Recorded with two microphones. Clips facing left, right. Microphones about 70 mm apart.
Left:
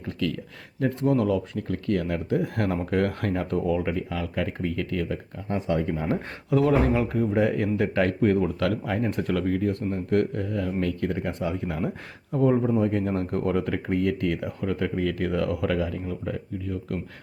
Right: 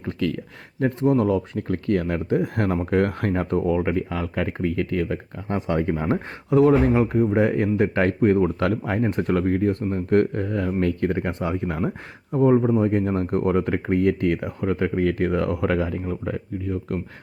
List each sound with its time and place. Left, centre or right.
0.0 s speech: right
2.4 s speech: right
6.5 s speech: right